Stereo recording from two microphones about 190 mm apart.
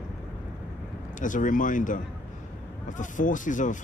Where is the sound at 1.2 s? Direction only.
45° left (ahead or behind).